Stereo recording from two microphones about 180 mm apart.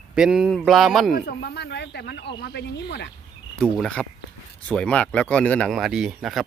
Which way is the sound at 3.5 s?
5° left (ahead or behind).